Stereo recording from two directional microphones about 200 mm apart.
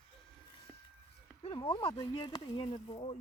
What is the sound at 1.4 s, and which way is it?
Speech, 25° left (ahead or behind).